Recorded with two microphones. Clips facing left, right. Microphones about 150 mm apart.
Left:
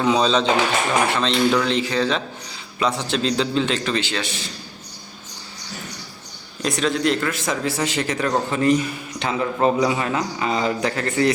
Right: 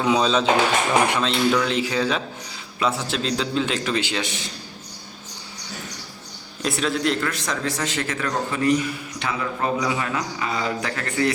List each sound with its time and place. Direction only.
0.0 s a man's voice: 5° right (ahead or behind)
6.6 s a man's voice: 5° right (ahead or behind); by 11.3 s 25° left (ahead or behind)